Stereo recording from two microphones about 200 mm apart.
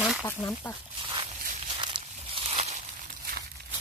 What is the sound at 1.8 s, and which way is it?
Walk, 25° right (ahead or behind).